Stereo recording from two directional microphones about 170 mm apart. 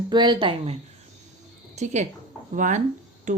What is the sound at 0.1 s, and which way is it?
Speech, 25° right (ahead or behind).